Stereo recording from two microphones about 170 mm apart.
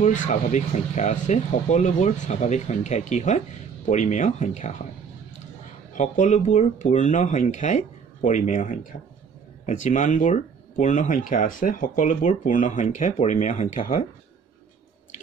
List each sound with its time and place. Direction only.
0.0 s speech: 45° left (ahead or behind)
5.9 s speech: 45° left (ahead or behind)